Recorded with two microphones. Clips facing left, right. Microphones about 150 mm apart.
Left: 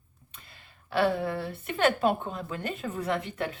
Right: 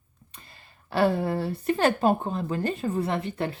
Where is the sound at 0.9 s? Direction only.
35° right (ahead or behind).